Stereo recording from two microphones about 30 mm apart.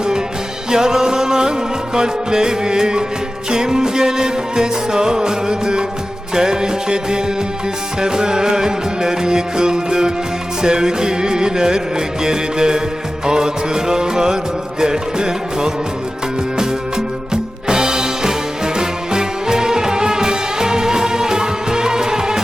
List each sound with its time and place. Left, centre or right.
0.7 s music: right
17.3 s music: right